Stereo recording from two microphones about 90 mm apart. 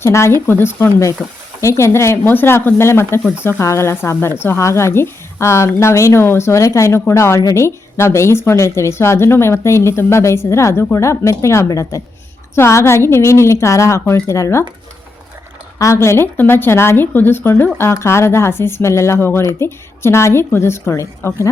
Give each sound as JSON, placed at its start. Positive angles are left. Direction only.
{"t": 0.0, "sound": "a woman's voice", "side_deg": 30}
{"t": 15.8, "sound": "a woman's voice", "side_deg": 30}